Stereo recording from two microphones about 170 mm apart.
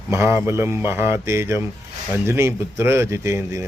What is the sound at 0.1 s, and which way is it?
Speech, 15° right (ahead or behind).